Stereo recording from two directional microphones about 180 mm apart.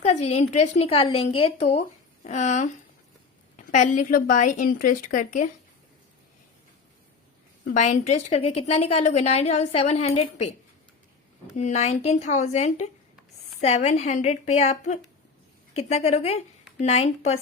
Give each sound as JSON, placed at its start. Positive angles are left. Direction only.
{"t": 0.0, "sound": "a woman's voice", "side_deg": 35}
{"t": 3.7, "sound": "a woman's voice", "side_deg": 45}
{"t": 7.6, "sound": "a woman's voice", "side_deg": 40}
{"t": 11.5, "sound": "a woman's voice", "side_deg": 40}